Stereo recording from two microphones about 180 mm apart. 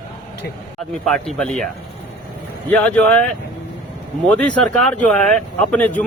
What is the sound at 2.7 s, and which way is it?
Speech, 10° left (ahead or behind).